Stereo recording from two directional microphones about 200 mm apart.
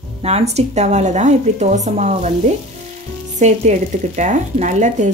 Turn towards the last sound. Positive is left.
turn(degrees=-35)  # may be behind; listen again after turning